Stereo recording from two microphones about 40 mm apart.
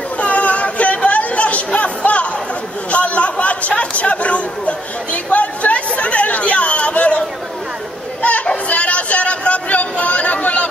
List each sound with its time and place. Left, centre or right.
0.2 s chatter: left
8.2 s children playing: left
8.6 s a sound: left